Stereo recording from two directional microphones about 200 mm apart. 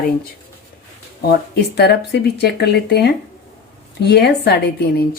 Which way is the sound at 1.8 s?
55° left (ahead or behind).